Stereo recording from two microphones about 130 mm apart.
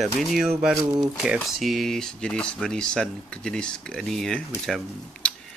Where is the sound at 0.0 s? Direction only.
Centre (ahead or behind).